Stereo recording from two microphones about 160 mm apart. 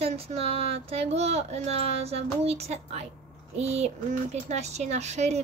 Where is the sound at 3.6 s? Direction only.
40° right (ahead or behind).